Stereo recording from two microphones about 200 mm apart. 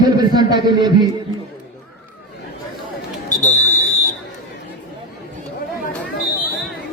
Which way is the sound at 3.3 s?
35° left (ahead or behind).